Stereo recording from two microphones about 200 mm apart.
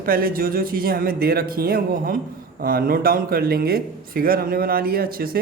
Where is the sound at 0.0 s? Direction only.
45° right (ahead or behind).